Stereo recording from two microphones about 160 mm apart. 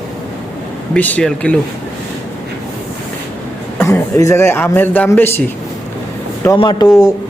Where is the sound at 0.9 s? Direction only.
10° left (ahead or behind).